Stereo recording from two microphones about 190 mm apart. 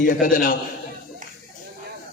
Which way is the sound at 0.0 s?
45° left (ahead or behind).